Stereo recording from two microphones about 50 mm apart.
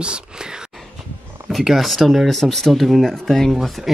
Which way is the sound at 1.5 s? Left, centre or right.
Centre.